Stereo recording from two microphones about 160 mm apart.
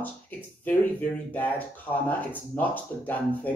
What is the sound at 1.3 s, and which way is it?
Speech, 10° left (ahead or behind).